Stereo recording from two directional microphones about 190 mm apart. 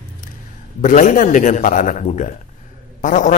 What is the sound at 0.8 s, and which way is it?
A man's voice, 45° left (ahead or behind).